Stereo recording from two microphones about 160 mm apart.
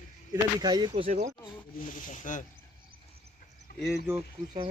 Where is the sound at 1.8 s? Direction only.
55° left (ahead or behind).